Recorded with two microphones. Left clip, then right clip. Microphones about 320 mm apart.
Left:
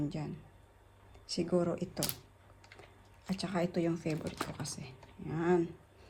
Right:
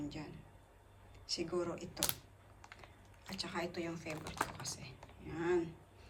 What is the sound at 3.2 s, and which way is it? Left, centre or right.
Speech, centre.